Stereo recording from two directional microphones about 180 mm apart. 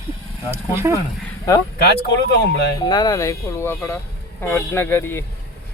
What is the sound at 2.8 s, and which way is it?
Speech, 20° left (ahead or behind).